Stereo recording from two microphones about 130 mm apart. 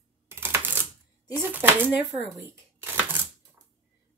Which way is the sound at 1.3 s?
15° right (ahead or behind).